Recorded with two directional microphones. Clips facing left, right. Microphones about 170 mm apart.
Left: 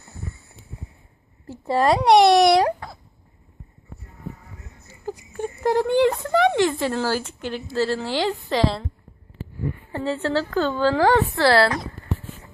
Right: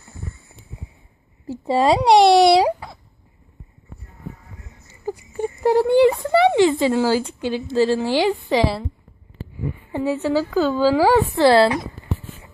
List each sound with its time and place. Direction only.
1.5 s a woman's voice: 10° right (ahead or behind)
2.1 s speech: 30° right (ahead or behind)
2.5 s speech: 10° right (ahead or behind)
5.3 s speech: 10° right (ahead or behind)
9.9 s a woman's voice: 10° right (ahead or behind)